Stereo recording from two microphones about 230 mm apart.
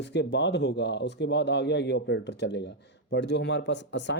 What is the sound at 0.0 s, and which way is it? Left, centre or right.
Speech, left.